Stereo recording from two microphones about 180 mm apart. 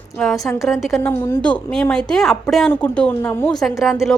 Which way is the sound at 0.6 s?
Centre (ahead or behind).